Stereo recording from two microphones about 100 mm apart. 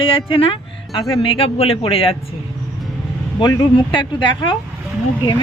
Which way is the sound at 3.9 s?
50° left (ahead or behind).